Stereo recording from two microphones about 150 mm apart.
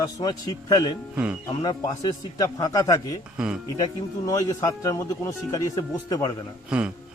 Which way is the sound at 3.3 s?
5° right (ahead or behind).